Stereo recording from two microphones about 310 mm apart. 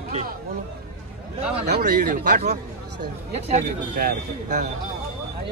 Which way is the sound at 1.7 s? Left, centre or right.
Right.